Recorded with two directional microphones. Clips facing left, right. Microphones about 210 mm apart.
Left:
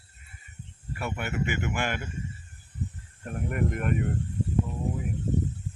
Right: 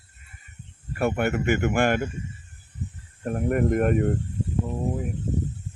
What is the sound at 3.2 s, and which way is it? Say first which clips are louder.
Speech: right 7 dB; 45° right (ahead or behind).